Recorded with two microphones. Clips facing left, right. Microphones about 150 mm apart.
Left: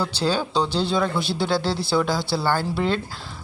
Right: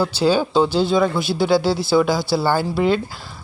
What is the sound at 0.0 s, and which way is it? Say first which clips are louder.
Speech: right 6 dB; 10° right (ahead or behind).